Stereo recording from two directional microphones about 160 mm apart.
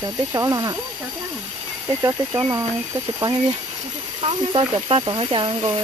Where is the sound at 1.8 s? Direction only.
20° right (ahead or behind).